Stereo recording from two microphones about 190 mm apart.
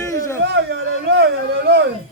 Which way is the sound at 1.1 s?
65° right (ahead or behind).